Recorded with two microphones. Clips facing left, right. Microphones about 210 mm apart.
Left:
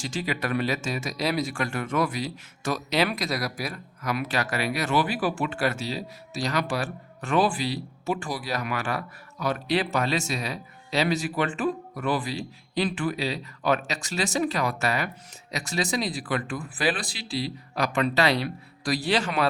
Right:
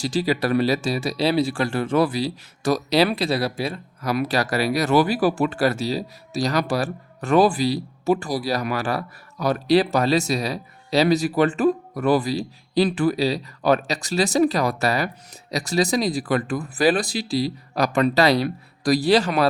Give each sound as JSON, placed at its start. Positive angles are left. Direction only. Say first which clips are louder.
{"t": 0.0, "sound": "speech", "louder": "right 8 dB", "side_deg": -35}